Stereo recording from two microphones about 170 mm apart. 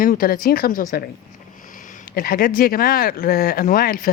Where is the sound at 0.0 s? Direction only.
60° left (ahead or behind).